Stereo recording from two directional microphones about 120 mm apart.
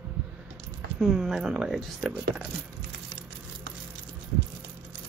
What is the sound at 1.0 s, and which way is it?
Speech, centre (ahead or behind).